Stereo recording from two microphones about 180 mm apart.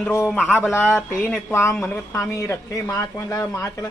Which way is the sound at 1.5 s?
15° left (ahead or behind).